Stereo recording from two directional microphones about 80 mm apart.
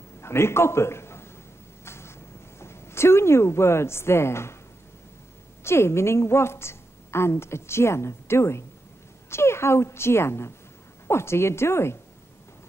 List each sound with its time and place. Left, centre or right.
0.2 s a man's voice: left
1.9 s vehicle: left
2.6 s a woman's voice: left
5.6 s a woman's voice: left